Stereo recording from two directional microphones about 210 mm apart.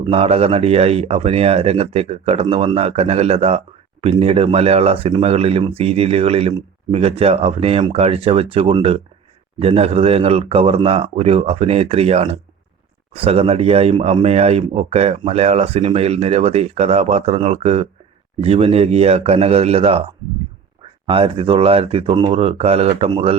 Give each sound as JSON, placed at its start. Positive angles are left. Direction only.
{"t": 0.0, "sound": "speech", "side_deg": -30}
{"t": 21.1, "sound": "speech", "side_deg": -25}